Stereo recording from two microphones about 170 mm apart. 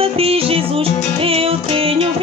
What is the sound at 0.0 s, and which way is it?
Music, 35° right (ahead or behind).